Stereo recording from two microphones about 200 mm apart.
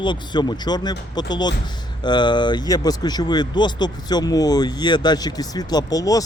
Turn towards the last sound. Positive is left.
turn(degrees=15)  # may be behind; listen again after turning